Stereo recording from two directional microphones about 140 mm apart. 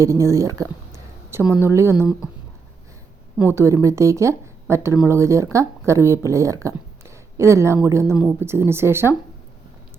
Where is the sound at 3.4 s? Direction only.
20° right (ahead or behind).